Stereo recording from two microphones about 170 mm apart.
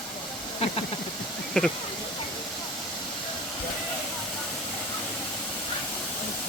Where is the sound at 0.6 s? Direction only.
40° left (ahead or behind).